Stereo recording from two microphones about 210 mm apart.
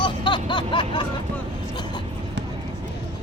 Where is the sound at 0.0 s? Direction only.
20° left (ahead or behind).